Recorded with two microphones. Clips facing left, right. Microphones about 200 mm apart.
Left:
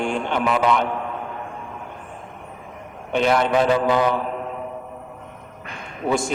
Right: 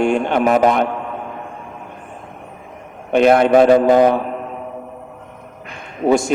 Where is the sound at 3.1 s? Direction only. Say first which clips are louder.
Right 7 dB; 55° right (ahead or behind).